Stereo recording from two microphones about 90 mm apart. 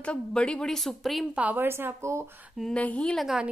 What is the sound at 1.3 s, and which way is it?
Speech, 15° right (ahead or behind).